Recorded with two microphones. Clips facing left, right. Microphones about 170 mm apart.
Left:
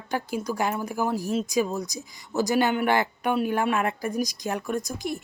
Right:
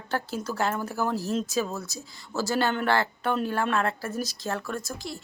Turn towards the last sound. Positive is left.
turn(degrees=20)  # may be behind; listen again after turning